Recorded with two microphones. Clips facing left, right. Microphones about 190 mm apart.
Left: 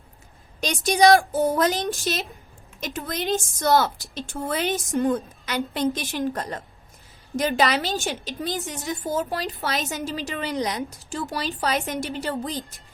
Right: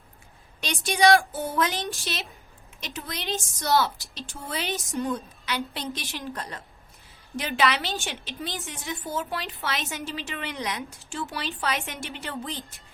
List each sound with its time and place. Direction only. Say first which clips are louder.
0.6 s a woman's voice: left 4 dB; 40° left (ahead or behind)